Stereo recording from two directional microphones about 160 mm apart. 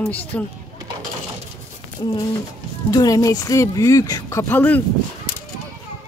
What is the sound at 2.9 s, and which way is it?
Speech, 20° left (ahead or behind).